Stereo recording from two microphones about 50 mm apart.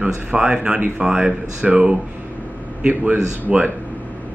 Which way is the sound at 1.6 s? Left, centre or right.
Right.